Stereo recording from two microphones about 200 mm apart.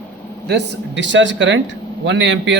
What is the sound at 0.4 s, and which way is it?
A man's voice, 60° right (ahead or behind).